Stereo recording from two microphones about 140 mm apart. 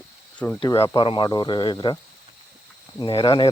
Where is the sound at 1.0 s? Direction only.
35° left (ahead or behind).